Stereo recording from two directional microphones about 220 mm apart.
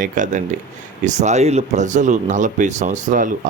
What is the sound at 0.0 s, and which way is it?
Speech, 35° right (ahead or behind).